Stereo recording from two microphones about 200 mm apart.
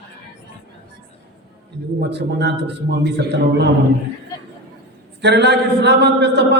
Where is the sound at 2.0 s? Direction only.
55° right (ahead or behind).